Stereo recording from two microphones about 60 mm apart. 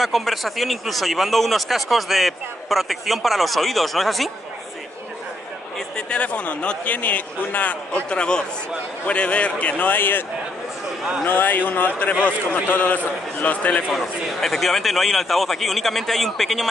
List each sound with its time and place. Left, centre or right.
0.0 s speech: centre
5.8 s a man's voice: centre
8.1 s a man's voice: centre; by 10.2 s left
11.2 s a man's voice: left
13.8 s speech: centre